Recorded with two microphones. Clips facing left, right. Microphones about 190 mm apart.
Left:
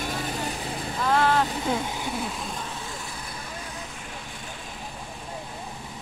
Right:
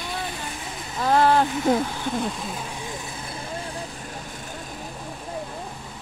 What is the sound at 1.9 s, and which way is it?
Speech, 15° left (ahead or behind).